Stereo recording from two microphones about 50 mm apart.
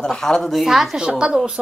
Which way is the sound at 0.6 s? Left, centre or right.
Centre.